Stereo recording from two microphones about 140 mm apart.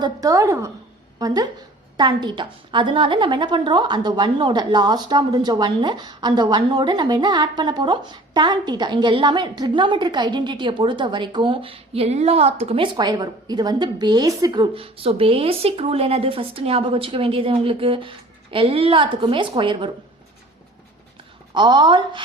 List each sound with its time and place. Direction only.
0.0 s a woman's voice: 25° right (ahead or behind)
21.5 s a woman's voice: 35° right (ahead or behind)